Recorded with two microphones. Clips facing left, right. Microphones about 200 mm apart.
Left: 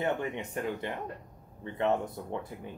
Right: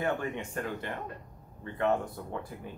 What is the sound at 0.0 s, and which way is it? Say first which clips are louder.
Speech: even; 20° left (ahead or behind).